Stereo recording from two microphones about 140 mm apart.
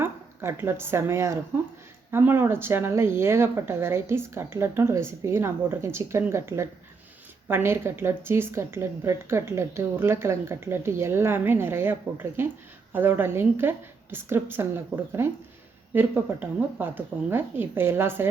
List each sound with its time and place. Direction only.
0.0 s speech: 15° right (ahead or behind)